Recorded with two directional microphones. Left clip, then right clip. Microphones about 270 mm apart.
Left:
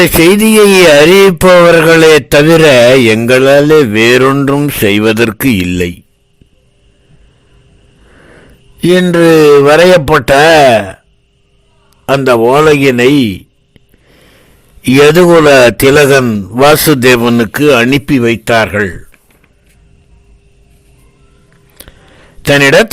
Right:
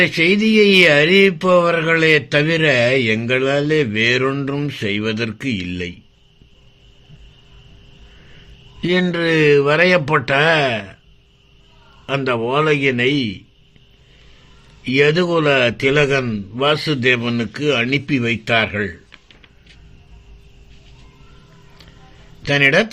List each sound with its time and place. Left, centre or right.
0.0 s speech: left
8.8 s speech: left
12.0 s speech: left
14.8 s speech: left
21.8 s a sound: left
22.4 s speech: left